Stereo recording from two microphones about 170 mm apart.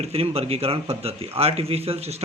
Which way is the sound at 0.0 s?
35° right (ahead or behind).